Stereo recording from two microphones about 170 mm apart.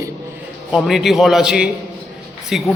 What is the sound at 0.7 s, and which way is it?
A man's voice, centre (ahead or behind).